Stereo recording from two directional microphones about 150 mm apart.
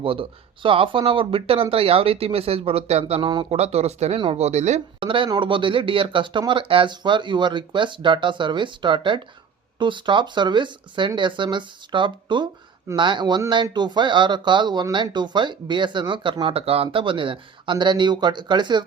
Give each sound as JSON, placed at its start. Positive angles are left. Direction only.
{"t": 0.0, "sound": "speech", "side_deg": -35}
{"t": 3.6, "sound": "speech", "side_deg": -45}
{"t": 5.0, "sound": "speech", "side_deg": -35}